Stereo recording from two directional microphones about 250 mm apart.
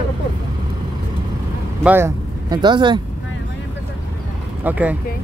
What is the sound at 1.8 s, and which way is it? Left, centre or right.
Speech, centre.